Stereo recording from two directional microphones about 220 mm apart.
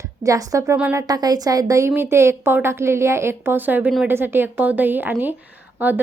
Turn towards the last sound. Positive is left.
turn(degrees=-10)  # may be behind; listen again after turning